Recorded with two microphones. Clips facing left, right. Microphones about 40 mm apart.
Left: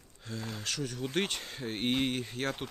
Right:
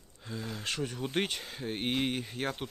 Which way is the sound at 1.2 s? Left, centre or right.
Centre.